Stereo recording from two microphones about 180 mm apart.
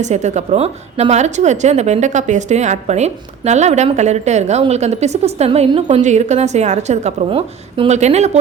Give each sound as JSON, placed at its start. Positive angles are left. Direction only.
{"t": 0.0, "sound": "a woman's voice", "side_deg": -40}